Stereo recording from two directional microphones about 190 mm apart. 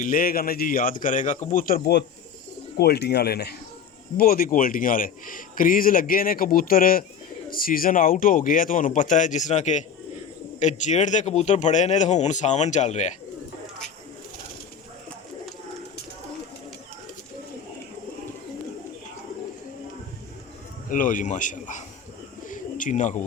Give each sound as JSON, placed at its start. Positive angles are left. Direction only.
{"t": 0.0, "sound": "a man's voice", "side_deg": 50}
{"t": 20.9, "sound": "a man's voice", "side_deg": 45}
{"t": 22.4, "sound": "bird", "side_deg": 40}